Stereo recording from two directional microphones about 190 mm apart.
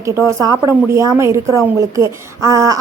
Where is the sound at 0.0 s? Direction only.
15° right (ahead or behind).